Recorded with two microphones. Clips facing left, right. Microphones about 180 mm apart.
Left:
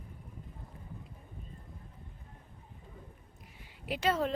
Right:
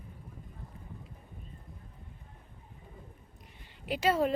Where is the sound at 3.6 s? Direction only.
Centre (ahead or behind).